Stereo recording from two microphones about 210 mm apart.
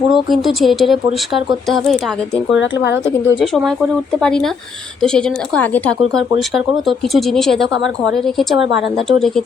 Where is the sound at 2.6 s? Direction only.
60° left (ahead or behind).